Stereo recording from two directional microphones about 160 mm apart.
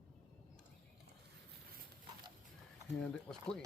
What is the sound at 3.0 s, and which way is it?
Speech, 5° left (ahead or behind).